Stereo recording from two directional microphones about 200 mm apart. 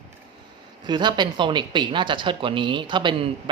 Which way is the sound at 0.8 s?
20° right (ahead or behind).